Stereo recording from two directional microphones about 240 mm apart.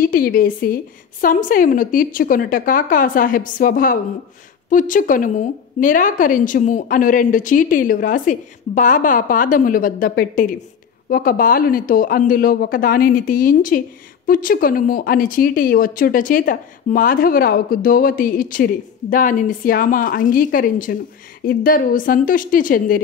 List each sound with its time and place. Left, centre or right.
0.0 s speech: left